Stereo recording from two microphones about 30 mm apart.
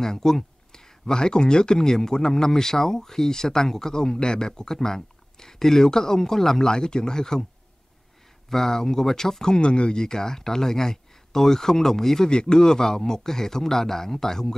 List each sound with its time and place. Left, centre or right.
0.0 s speech: centre
6.6 s speech: left
8.5 s speech: centre; by 10.0 s left
10.0 s speech: centre
12.3 s speech: left